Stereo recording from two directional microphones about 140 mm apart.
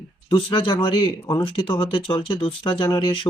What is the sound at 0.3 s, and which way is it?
Speech, 40° left (ahead or behind).